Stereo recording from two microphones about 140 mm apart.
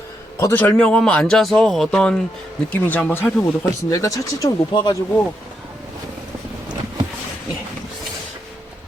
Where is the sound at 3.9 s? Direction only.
25° left (ahead or behind).